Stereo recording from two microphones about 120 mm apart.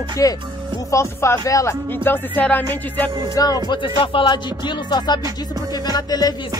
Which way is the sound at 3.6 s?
45° left (ahead or behind).